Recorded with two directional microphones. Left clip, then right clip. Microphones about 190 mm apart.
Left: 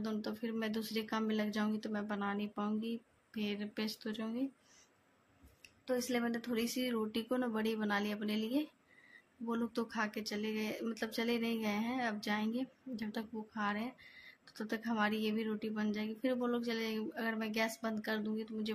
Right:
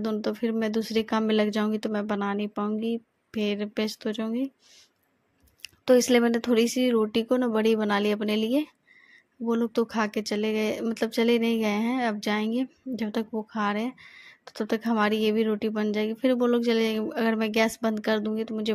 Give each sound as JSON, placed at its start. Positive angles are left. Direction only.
{"t": 0.0, "sound": "speech", "side_deg": -40}
{"t": 5.6, "sound": "speech", "side_deg": -50}